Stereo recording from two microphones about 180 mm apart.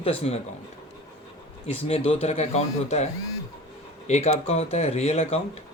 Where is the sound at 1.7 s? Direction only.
35° left (ahead or behind).